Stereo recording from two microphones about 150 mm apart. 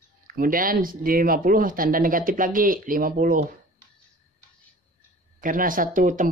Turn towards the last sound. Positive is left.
turn(degrees=-60)  # may be behind; listen again after turning